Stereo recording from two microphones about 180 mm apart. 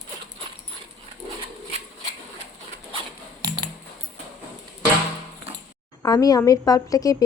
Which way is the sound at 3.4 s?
20° right (ahead or behind).